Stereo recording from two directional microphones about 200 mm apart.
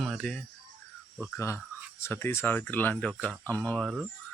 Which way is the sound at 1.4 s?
15° left (ahead or behind).